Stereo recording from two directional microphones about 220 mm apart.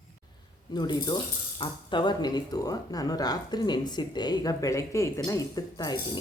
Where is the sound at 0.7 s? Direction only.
20° left (ahead or behind).